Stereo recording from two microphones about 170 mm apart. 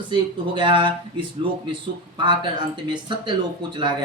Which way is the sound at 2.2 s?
30° right (ahead or behind).